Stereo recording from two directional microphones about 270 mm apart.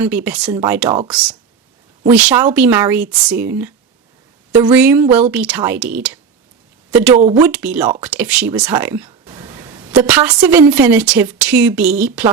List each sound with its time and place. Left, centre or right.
0.0 s speech: centre
2.0 s speech: centre
7.2 s speech: right
7.4 s speech: centre